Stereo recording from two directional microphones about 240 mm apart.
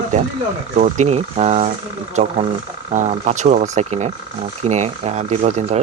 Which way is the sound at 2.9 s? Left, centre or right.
Right.